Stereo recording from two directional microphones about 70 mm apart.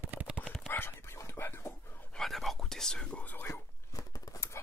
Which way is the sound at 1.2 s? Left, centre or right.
Left.